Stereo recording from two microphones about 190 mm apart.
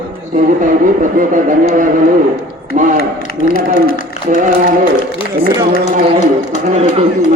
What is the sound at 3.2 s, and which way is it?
Speech, 45° left (ahead or behind).